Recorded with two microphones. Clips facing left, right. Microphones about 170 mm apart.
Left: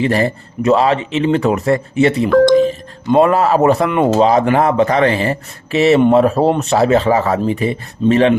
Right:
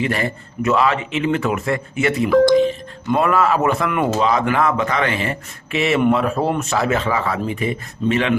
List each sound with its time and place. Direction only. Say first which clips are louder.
0.0 s speech: left 6 dB; 30° left (ahead or behind)
2.3 s speech: left 2 dB; 5° right (ahead or behind)
3.1 s speech: left 5 dB; 30° left (ahead or behind)